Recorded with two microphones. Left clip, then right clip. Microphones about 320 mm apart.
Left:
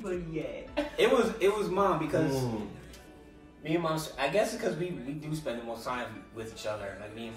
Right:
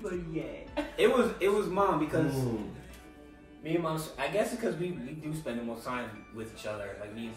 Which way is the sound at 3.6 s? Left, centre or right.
Centre.